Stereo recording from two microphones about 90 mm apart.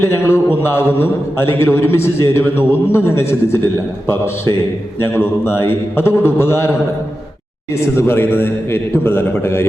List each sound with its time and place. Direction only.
0.0 s a man's voice: 25° left (ahead or behind)
7.8 s a man's voice: 25° left (ahead or behind)